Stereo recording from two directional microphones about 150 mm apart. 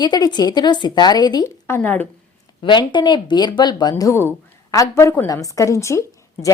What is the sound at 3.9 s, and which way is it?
Speech, 20° left (ahead or behind).